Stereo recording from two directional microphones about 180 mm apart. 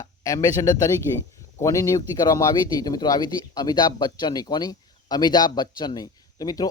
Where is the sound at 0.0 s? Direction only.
20° left (ahead or behind).